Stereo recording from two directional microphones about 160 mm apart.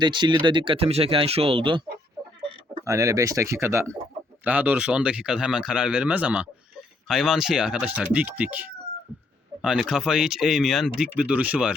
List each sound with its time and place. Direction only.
0.0 s speech: 30° right (ahead or behind)
2.8 s speech: 20° right (ahead or behind)